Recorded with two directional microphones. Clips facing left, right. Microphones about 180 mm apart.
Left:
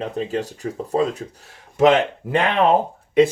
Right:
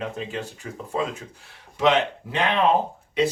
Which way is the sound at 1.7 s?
50° left (ahead or behind).